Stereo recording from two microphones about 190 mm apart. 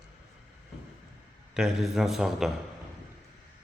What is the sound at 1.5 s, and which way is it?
Speech, 5° right (ahead or behind).